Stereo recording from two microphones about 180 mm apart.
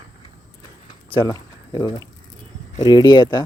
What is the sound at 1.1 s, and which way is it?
Speech, 25° left (ahead or behind).